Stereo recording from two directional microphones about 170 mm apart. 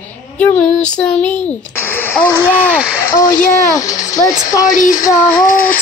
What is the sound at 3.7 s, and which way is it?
Speech, 20° left (ahead or behind).